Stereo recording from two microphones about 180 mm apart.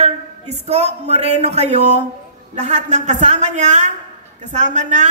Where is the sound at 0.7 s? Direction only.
35° right (ahead or behind).